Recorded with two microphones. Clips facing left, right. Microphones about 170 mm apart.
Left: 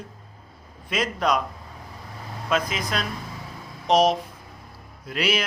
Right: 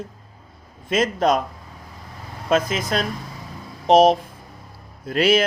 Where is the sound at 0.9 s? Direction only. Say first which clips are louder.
Right 5 dB; 45° right (ahead or behind).